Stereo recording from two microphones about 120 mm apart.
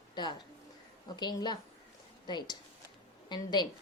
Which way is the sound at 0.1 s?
40° left (ahead or behind).